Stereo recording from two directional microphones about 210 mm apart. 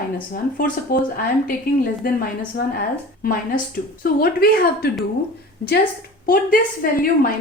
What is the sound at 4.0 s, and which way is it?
Speech, 45° left (ahead or behind).